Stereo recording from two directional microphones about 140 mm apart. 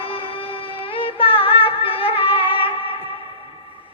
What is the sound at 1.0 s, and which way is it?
Music, 40° left (ahead or behind).